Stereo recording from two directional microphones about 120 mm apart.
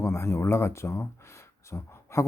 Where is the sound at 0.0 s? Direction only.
20° left (ahead or behind).